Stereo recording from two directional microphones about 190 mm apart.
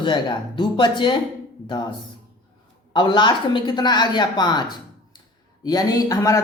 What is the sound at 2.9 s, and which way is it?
A woman's voice, 25° left (ahead or behind).